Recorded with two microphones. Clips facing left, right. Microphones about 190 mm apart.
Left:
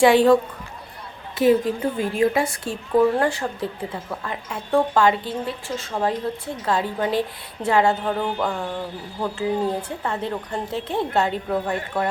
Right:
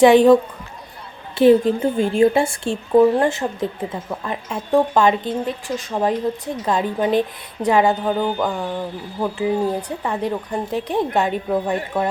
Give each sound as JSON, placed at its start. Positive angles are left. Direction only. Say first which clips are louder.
{"t": 0.0, "sound": "a woman's voice", "louder": "right 4 dB", "side_deg": -20}
{"t": 1.4, "sound": "a woman's voice", "louder": "right 5 dB", "side_deg": -25}